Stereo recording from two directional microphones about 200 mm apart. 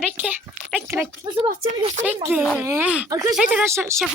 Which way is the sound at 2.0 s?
10° right (ahead or behind).